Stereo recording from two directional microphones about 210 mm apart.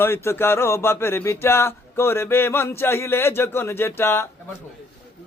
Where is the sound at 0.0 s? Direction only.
10° left (ahead or behind).